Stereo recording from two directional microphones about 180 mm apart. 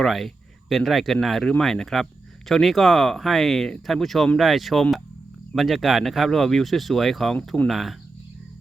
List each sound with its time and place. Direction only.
0.0 s speech: centre (ahead or behind)